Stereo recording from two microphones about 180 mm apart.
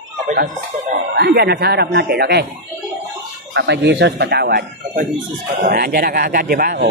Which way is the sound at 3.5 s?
70° right (ahead or behind).